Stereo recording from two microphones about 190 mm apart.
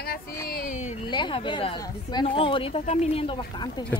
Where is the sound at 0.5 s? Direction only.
40° left (ahead or behind).